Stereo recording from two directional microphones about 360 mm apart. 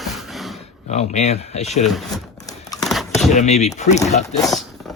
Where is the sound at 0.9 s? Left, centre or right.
Centre.